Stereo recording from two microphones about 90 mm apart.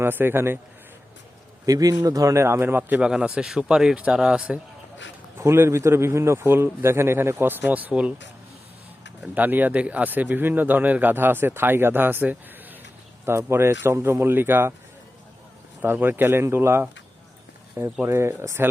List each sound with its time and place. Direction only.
0.0 s speech: 25° right (ahead or behind)
1.6 s a man's voice: 40° right (ahead or behind); by 3.0 s 25° right (ahead or behind)
3.0 s speech: 10° right (ahead or behind)
5.4 s speech: 30° right (ahead or behind)
9.2 s speech: 15° right (ahead or behind)
15.8 s speech: 20° right (ahead or behind)
18.0 s speech: 30° right (ahead or behind)